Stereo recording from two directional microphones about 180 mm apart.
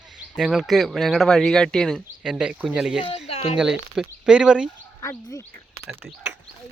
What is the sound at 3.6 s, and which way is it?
Speech, centre (ahead or behind).